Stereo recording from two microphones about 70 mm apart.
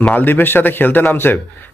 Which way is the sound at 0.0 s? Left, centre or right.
Left.